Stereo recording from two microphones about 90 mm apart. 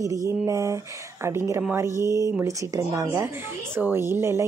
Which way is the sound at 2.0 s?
40° left (ahead or behind).